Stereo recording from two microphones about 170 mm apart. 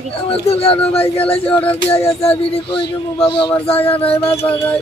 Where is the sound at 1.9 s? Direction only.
35° left (ahead or behind).